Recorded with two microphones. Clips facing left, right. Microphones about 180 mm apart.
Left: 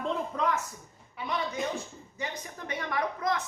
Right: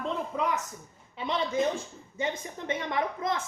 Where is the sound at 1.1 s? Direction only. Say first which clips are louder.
Right 4 dB; 25° right (ahead or behind).